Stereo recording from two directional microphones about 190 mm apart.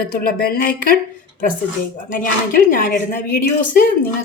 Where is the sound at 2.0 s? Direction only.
45° left (ahead or behind).